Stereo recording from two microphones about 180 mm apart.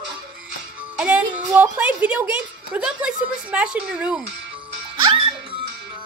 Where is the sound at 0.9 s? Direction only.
5° right (ahead or behind).